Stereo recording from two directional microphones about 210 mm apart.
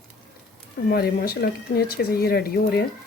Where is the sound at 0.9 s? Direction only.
45° left (ahead or behind).